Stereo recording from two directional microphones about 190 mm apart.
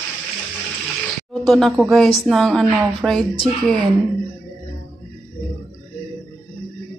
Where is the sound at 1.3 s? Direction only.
Centre (ahead or behind).